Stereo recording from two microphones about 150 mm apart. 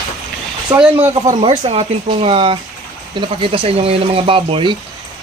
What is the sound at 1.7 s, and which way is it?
Speech, 40° right (ahead or behind).